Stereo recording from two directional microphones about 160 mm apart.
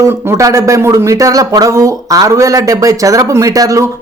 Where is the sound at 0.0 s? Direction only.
15° right (ahead or behind).